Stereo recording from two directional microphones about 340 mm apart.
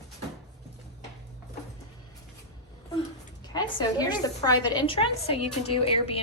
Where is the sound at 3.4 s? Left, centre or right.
Centre.